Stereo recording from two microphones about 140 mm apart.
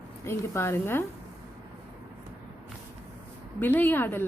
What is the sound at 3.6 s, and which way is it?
Speech, 15° left (ahead or behind).